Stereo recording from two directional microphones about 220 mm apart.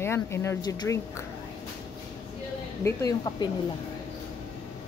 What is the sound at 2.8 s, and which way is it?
Speech, 15° left (ahead or behind).